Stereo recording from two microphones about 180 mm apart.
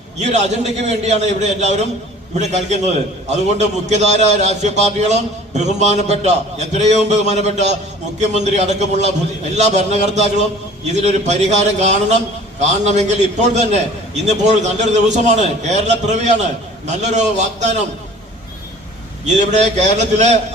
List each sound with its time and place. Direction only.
0.2 s a man's voice: 40° right (ahead or behind)
19.2 s a man's voice: 40° right (ahead or behind)